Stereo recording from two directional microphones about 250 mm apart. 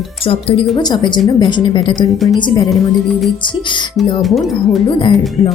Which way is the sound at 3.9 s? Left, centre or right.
Centre.